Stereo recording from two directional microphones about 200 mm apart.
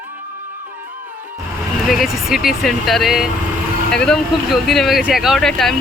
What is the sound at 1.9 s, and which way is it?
Speech, centre (ahead or behind).